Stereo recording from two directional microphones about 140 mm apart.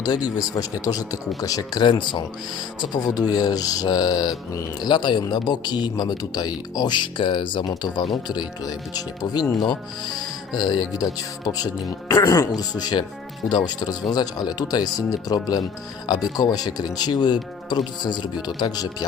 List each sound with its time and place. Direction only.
0.0 s speech: 30° left (ahead or behind)